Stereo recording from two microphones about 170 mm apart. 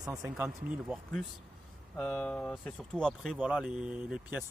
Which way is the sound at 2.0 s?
5° left (ahead or behind).